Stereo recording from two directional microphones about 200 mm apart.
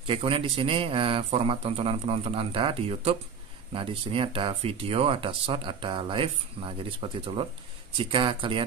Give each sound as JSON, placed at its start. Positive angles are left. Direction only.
{"t": 0.0, "sound": "speech", "side_deg": -25}